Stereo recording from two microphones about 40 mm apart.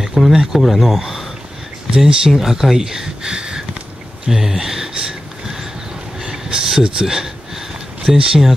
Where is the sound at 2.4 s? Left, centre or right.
Centre; by 3.6 s right.